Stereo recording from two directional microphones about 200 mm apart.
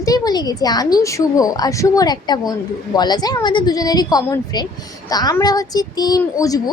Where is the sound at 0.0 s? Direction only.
20° left (ahead or behind).